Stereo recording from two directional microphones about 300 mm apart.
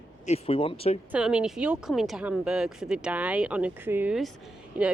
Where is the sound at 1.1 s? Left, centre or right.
Centre.